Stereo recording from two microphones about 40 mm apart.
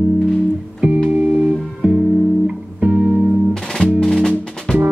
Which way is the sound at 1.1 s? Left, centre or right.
Right.